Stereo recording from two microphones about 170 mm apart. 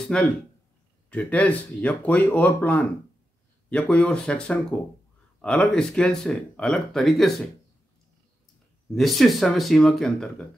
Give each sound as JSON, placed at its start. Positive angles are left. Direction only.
{"t": 0.1, "sound": "speech", "side_deg": 5}
{"t": 8.9, "sound": "speech", "side_deg": 0}